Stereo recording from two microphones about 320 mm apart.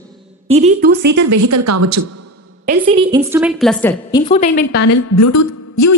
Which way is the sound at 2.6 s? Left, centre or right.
Right.